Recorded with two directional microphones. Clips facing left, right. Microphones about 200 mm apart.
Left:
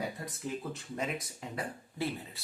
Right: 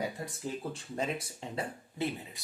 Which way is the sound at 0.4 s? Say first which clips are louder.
Even; 30° right (ahead or behind).